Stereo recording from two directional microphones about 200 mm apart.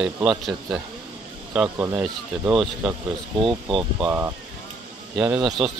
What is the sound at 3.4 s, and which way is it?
Speech, 25° right (ahead or behind).